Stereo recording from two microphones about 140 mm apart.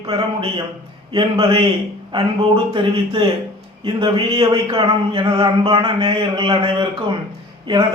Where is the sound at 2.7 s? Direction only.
40° right (ahead or behind).